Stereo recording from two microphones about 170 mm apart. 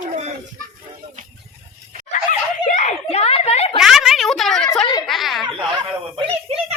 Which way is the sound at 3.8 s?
Centre (ahead or behind).